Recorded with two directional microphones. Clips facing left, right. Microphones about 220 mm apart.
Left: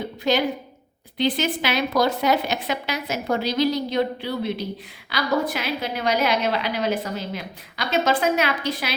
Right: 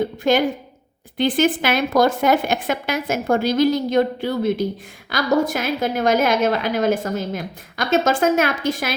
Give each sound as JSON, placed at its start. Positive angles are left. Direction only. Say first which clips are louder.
{"t": 0.2, "sound": "a woman's voice", "louder": "right 3 dB", "side_deg": -50}